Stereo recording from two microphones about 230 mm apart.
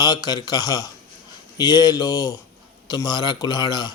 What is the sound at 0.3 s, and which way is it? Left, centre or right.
Speech, centre.